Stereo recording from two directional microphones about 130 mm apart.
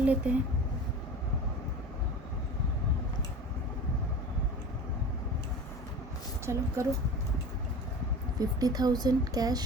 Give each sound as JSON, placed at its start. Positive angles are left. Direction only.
{"t": 0.0, "sound": "speech", "side_deg": -10}
{"t": 6.4, "sound": "speech", "side_deg": -20}
{"t": 8.4, "sound": "speech", "side_deg": -30}